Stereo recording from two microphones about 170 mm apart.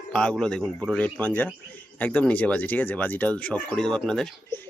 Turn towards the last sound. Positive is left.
turn(degrees=5)  # may be behind; listen again after turning